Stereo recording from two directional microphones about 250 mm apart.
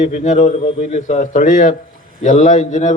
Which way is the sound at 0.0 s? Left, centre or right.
Left.